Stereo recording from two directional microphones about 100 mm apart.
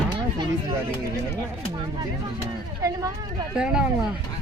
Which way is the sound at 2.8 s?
35° right (ahead or behind).